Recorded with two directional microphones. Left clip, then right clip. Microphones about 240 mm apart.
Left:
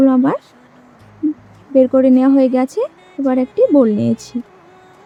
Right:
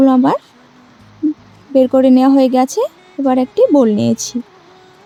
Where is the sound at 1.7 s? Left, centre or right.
Centre.